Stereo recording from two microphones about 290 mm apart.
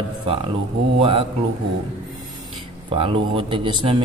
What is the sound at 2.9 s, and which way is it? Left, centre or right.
Speech, centre.